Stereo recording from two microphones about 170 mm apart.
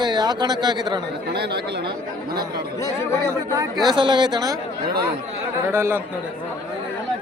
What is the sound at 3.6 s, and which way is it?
Speech, 25° right (ahead or behind).